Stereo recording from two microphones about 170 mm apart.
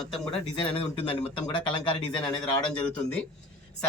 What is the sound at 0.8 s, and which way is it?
Speech, 30° left (ahead or behind).